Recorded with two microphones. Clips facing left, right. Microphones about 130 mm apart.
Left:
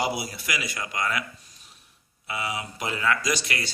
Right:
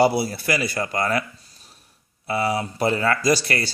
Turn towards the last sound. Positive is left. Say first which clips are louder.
# right 8 dB
turn(degrees=-35)  # may be behind; listen again after turning